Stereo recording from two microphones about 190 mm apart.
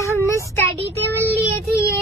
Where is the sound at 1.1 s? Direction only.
10° right (ahead or behind).